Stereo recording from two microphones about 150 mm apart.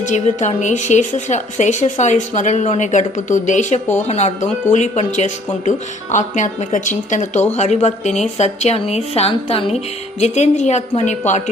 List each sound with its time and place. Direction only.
0.3 s a woman's voice: 50° left (ahead or behind)